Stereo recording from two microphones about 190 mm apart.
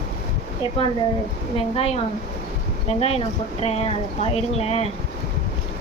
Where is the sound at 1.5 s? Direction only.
30° left (ahead or behind).